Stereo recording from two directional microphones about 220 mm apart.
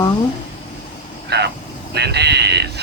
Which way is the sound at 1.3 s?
50° right (ahead or behind).